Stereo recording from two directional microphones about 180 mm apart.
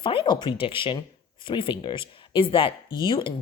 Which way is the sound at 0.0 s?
30° left (ahead or behind).